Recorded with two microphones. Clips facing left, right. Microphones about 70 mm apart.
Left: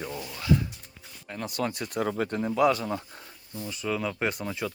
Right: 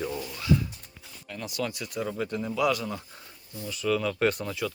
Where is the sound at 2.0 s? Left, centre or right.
Left.